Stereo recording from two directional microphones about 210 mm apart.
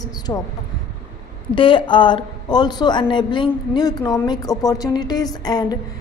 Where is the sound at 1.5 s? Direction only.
25° left (ahead or behind).